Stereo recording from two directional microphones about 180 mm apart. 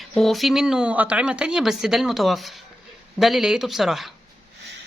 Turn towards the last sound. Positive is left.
turn(degrees=0)  # may be behind; listen again after turning